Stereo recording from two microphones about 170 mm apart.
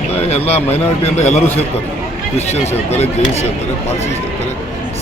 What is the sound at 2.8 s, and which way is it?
Speech, 40° left (ahead or behind).